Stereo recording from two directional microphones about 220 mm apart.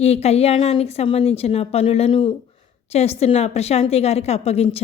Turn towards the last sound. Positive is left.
turn(degrees=30)  # may be behind; listen again after turning